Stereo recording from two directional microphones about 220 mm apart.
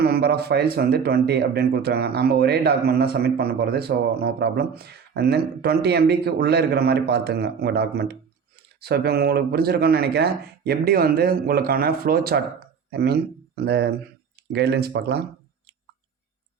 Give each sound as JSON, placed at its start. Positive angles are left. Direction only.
{"t": 0.0, "sound": "speech", "side_deg": -45}